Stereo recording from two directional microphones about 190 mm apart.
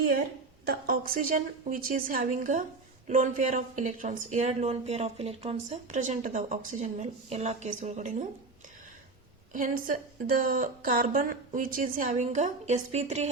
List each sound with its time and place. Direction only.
0.7 s speech: 50° right (ahead or behind)
9.5 s speech: 45° right (ahead or behind)